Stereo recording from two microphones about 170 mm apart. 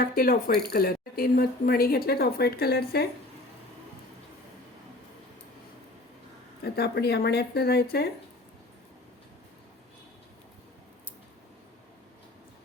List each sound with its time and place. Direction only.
0.0 s speech: 60° left (ahead or behind)
6.7 s speech: 70° left (ahead or behind)